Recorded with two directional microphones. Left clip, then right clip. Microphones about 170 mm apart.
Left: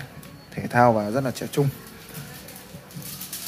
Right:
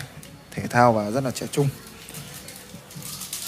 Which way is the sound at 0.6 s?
Centre (ahead or behind).